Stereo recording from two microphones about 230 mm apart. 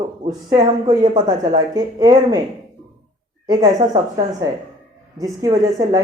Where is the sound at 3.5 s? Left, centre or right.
Centre.